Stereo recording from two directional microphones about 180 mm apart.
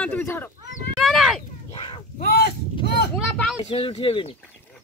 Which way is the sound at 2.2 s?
60° left (ahead or behind).